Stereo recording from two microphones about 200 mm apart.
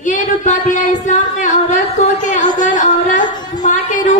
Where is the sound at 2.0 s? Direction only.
35° left (ahead or behind).